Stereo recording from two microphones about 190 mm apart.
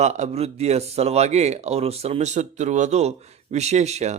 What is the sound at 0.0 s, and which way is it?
Speech, 35° right (ahead or behind).